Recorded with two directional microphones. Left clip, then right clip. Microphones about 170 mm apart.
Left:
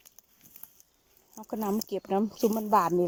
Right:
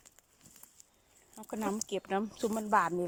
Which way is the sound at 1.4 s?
10° left (ahead or behind).